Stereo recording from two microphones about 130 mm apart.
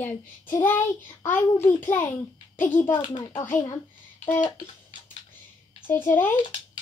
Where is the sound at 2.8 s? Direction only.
40° left (ahead or behind).